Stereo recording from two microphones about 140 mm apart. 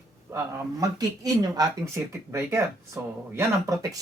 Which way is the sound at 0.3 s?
20° right (ahead or behind).